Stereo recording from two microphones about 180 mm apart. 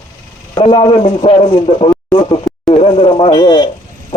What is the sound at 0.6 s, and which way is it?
A man's voice, 30° left (ahead or behind).